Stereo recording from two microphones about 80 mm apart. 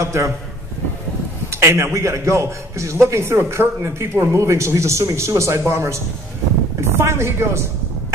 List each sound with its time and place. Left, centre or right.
0.0 s a man's voice: right
1.5 s a man's voice: right